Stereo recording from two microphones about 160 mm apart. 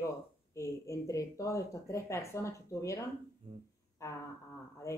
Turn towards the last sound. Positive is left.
turn(degrees=20)  # may be behind; listen again after turning